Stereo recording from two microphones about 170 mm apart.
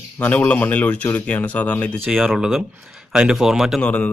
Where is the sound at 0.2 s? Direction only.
10° left (ahead or behind).